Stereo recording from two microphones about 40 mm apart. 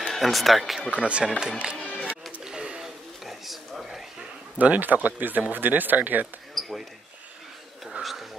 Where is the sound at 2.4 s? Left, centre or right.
Centre.